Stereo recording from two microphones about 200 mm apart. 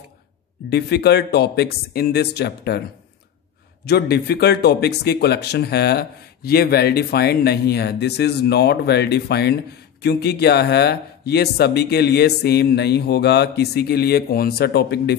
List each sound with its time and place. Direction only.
0.7 s speech: 55° left (ahead or behind)
3.8 s speech: 55° left (ahead or behind)